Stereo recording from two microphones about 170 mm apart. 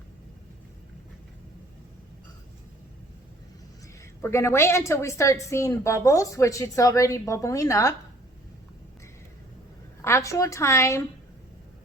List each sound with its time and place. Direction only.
4.2 s a woman's voice: 15° left (ahead or behind)
10.0 s a woman's voice: 15° left (ahead or behind)